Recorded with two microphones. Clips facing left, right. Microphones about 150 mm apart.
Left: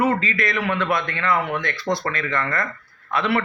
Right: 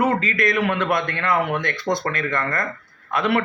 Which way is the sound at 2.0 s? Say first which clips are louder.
Right 1 dB; 45° right (ahead or behind).